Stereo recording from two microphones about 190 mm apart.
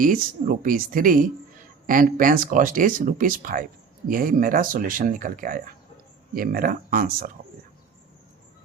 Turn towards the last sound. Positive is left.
turn(degrees=-50)  # may be behind; listen again after turning